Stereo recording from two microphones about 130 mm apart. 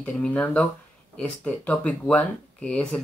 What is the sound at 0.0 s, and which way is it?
Speech, 10° left (ahead or behind).